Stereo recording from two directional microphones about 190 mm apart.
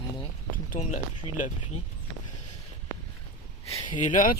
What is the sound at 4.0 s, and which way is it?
Speech, 40° left (ahead or behind).